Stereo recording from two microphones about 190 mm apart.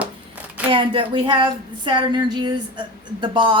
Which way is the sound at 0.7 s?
25° right (ahead or behind).